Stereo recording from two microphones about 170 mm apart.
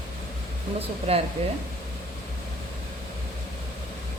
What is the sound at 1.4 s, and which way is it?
Speech, 35° right (ahead or behind).